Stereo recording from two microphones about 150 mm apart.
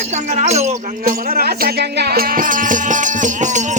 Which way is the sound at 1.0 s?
90° right.